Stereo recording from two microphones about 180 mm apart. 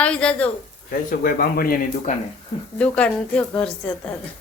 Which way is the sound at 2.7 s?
5° left (ahead or behind).